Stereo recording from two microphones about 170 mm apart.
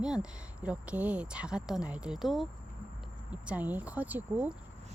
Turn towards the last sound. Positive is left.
turn(degrees=-10)  # may be behind; listen again after turning